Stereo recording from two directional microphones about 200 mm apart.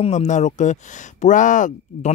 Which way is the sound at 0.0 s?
35° left (ahead or behind).